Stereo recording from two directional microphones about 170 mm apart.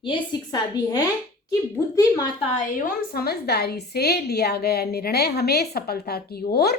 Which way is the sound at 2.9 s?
65° left (ahead or behind).